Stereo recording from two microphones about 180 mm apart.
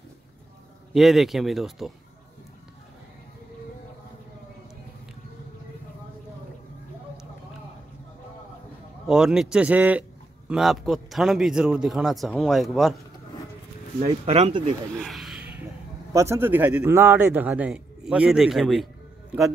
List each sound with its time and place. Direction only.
0.9 s a man's voice: centre (ahead or behind)
9.0 s a man's voice: 5° right (ahead or behind)
13.9 s speech: 35° right (ahead or behind)
15.0 s speech: centre (ahead or behind)